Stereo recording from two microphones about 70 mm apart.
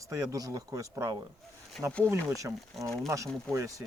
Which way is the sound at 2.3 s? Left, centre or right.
Right.